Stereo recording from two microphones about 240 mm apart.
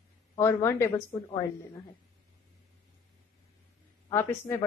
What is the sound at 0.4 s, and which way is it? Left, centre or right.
Speech, centre.